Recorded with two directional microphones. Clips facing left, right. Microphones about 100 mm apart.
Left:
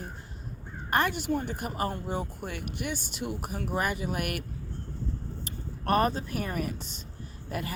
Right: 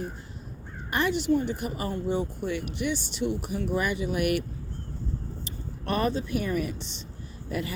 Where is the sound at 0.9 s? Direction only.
50° left (ahead or behind).